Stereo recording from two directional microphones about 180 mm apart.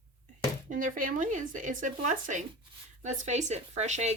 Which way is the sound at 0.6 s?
50° right (ahead or behind).